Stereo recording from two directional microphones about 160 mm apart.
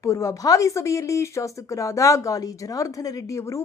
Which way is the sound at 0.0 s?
20° left (ahead or behind).